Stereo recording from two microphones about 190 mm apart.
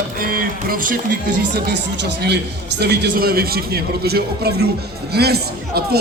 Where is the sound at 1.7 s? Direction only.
60° right (ahead or behind).